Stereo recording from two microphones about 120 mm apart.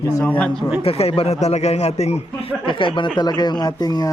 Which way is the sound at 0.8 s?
55° left (ahead or behind).